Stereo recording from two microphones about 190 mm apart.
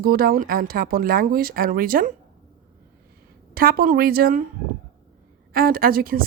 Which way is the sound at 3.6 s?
50° right (ahead or behind).